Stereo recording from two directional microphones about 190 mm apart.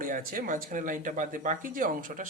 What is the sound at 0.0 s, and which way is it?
Speech, 50° right (ahead or behind).